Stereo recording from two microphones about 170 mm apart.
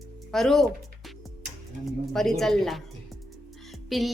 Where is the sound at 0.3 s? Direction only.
Centre (ahead or behind).